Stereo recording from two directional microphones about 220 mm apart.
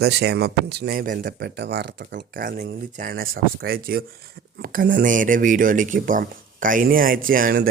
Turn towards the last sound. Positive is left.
turn(degrees=-40)  # may be behind; listen again after turning